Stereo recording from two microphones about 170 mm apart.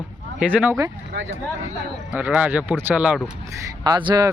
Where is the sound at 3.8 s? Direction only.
25° right (ahead or behind).